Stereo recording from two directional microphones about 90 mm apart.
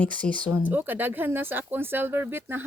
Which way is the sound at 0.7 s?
20° right (ahead or behind).